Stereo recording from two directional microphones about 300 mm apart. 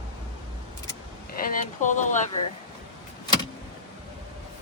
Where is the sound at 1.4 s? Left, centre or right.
Left.